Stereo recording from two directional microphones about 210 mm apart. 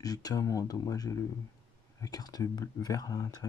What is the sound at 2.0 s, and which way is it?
Speech, 15° left (ahead or behind).